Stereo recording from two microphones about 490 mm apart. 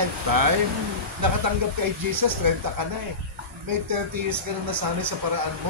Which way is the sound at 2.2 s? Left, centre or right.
Right.